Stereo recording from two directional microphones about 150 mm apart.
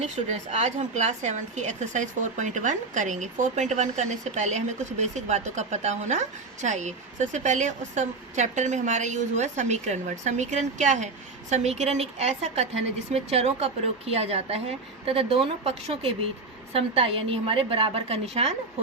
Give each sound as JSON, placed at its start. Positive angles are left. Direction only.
{"t": 0.0, "sound": "a woman's voice", "side_deg": -50}